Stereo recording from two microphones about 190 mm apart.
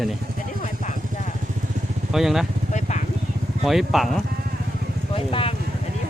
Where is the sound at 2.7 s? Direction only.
35° left (ahead or behind).